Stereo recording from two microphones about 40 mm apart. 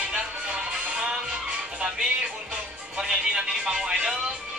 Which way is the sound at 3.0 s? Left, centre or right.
Right.